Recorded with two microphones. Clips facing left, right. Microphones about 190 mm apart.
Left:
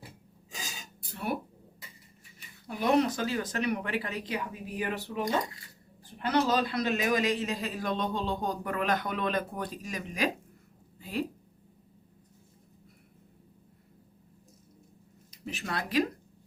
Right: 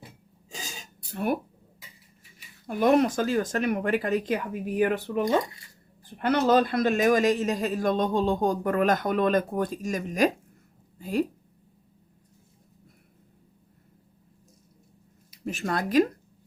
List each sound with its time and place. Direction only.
1.1 s a sound: 50° right (ahead or behind)
2.6 s a man's voice: 50° right (ahead or behind)
6.2 s a man's voice: 55° right (ahead or behind)
15.4 s a man's voice: 45° right (ahead or behind)